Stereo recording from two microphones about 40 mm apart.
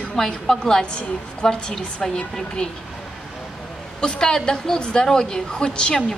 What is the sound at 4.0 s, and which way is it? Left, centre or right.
A woman's voice, centre.